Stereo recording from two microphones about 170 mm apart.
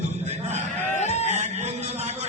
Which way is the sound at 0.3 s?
40° right (ahead or behind).